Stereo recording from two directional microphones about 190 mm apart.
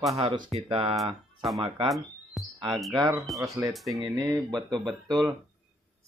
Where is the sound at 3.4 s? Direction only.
15° right (ahead or behind).